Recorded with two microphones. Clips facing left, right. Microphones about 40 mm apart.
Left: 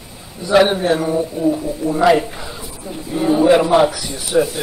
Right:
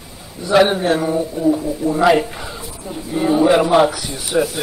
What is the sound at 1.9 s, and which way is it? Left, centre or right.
Speech, centre.